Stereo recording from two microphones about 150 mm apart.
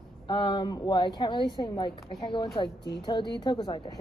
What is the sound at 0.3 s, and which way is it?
A woman's voice, 30° left (ahead or behind).